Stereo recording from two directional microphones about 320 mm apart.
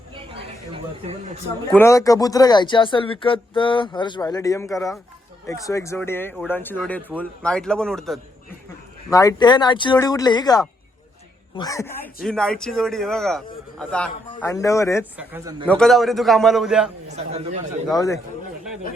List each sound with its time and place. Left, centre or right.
0.1 s a sound: centre
1.7 s speech: centre
15.2 s speech: centre
15.6 s speech: centre
17.1 s speech: centre
17.9 s speech: centre